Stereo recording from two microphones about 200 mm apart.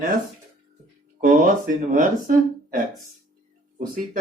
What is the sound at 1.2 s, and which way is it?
Speech, 40° right (ahead or behind).